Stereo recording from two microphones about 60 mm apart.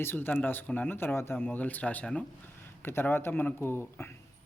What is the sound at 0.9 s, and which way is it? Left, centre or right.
Speech, left.